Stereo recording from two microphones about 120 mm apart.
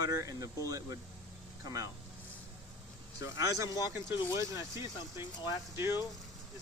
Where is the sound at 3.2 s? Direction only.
25° right (ahead or behind).